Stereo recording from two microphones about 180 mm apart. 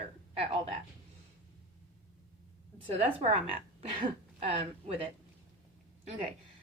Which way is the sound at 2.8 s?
30° right (ahead or behind).